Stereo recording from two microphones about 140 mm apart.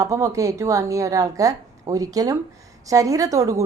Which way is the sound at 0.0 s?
25° right (ahead or behind).